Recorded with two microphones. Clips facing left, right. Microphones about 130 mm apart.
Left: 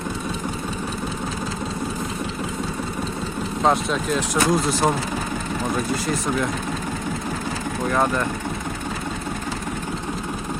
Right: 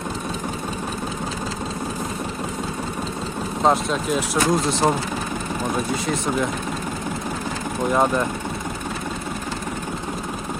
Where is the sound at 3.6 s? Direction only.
Centre (ahead or behind).